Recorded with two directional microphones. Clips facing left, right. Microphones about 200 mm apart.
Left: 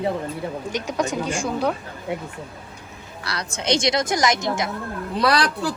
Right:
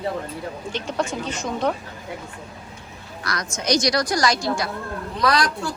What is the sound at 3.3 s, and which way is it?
Speech, 30° left (ahead or behind).